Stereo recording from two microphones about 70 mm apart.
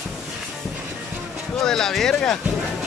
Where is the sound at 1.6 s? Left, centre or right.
Centre.